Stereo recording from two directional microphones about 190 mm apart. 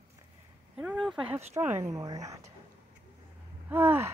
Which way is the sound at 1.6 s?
10° right (ahead or behind).